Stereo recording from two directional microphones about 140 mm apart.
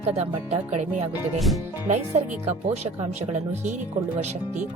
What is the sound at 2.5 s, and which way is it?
Speech, 50° right (ahead or behind).